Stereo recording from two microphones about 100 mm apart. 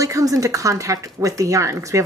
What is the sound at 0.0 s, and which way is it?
Speech, 35° right (ahead or behind).